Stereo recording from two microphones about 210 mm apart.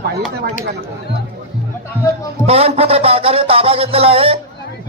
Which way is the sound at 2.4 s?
30° right (ahead or behind).